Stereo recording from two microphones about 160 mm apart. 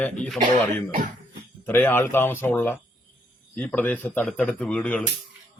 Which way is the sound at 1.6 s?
15° left (ahead or behind).